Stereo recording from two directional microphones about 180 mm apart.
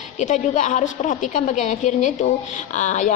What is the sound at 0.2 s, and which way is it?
A woman's voice, 40° left (ahead or behind).